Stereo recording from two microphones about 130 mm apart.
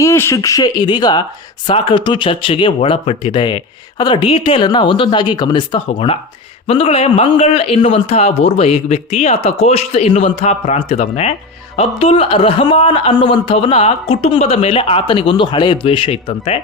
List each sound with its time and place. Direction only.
0.0 s a man's voice: 20° left (ahead or behind); by 16.6 s 45° left (ahead or behind)